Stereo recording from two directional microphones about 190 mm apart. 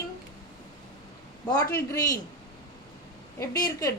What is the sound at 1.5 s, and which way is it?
Speech, 20° left (ahead or behind).